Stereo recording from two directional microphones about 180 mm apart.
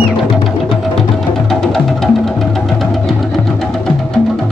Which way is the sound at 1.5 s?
Centre (ahead or behind).